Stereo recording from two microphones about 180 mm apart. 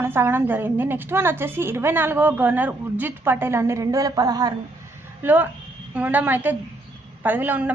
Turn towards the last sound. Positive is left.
turn(degrees=-10)  # may be behind; listen again after turning